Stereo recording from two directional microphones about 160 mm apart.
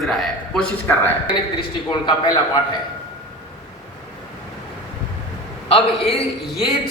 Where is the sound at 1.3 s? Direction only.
30° left (ahead or behind).